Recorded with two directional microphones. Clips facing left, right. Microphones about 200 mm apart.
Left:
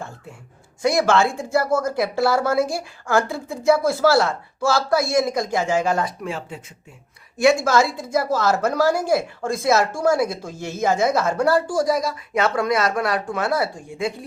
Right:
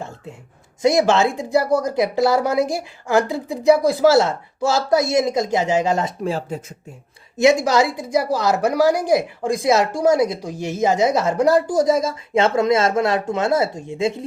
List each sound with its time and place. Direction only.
0.8 s a woman's voice: 20° right (ahead or behind)
6.2 s speech: 40° right (ahead or behind)
7.3 s a woman's voice: 20° right (ahead or behind)